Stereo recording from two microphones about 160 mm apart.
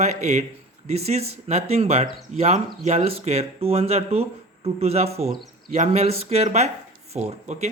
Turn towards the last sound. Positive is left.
turn(degrees=-45)  # may be behind; listen again after turning